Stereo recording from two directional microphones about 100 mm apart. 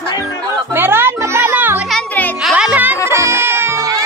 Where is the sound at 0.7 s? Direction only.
20° right (ahead or behind).